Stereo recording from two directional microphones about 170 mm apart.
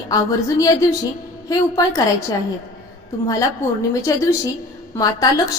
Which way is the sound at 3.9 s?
20° left (ahead or behind).